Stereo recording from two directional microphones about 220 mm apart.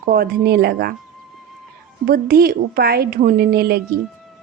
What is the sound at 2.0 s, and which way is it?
A woman's voice, 45° right (ahead or behind).